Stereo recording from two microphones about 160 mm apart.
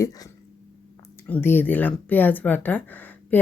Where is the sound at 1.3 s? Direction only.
15° left (ahead or behind).